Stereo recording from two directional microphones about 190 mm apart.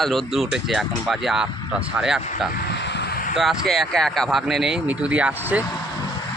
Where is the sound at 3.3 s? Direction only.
Centre (ahead or behind).